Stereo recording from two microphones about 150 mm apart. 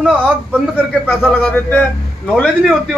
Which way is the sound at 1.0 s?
15° left (ahead or behind).